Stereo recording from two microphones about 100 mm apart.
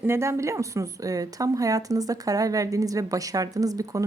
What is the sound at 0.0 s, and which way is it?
A woman's voice, 25° right (ahead or behind).